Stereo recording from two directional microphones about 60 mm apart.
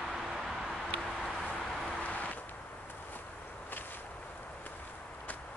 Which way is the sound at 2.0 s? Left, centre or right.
Left.